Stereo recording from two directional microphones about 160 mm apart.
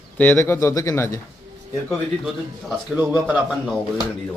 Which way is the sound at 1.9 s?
Centre (ahead or behind).